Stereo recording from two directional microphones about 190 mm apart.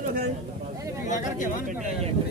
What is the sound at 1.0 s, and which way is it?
Speech, 40° left (ahead or behind).